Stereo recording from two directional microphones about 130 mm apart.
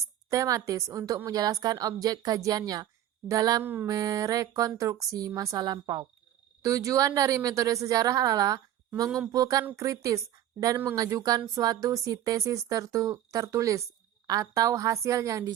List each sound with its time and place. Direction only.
0.3 s speech: 25° right (ahead or behind)
3.6 s mantra: 15° right (ahead or behind)
3.8 s speech: 30° right (ahead or behind)